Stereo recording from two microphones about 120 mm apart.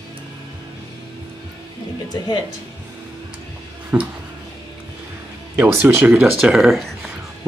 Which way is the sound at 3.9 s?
10° right (ahead or behind).